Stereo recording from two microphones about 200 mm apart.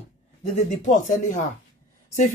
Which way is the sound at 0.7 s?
40° left (ahead or behind).